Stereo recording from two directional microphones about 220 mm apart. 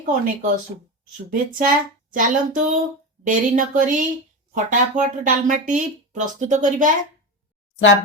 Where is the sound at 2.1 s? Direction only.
35° right (ahead or behind).